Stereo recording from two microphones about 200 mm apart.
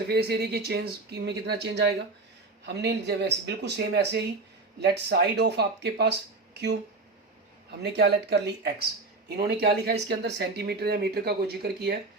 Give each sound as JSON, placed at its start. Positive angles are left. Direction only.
{"t": 0.1, "sound": "speech", "side_deg": -55}
{"t": 7.7, "sound": "speech", "side_deg": -55}